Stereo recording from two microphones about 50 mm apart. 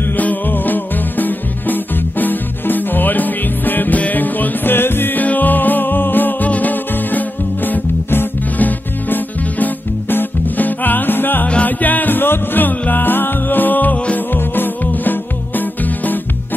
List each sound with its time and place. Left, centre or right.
0.2 s music: left
5.2 s music: left
11.4 s music: left